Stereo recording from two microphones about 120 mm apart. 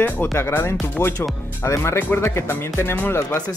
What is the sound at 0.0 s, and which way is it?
Speech, 20° left (ahead or behind).